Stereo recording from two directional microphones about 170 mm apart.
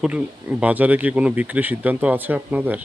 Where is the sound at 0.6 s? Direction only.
10° right (ahead or behind).